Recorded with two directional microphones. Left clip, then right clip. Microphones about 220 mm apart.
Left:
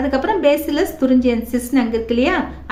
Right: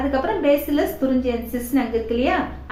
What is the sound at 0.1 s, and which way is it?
A woman's voice, 50° left (ahead or behind).